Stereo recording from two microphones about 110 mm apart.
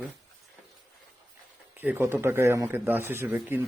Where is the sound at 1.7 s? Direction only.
15° right (ahead or behind).